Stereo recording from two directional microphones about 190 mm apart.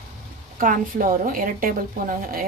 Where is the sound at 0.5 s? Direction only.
45° right (ahead or behind).